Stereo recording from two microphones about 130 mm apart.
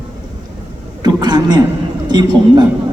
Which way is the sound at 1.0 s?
35° right (ahead or behind).